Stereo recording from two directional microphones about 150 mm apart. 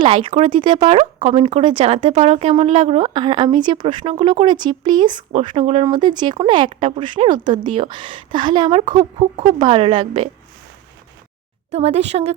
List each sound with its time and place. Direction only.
0.0 s speech: 35° right (ahead or behind)
0.7 s speech: 50° right (ahead or behind)
3.0 s speech: 30° right (ahead or behind)
5.8 s speech: 30° right (ahead or behind)
11.7 s speech: 45° right (ahead or behind)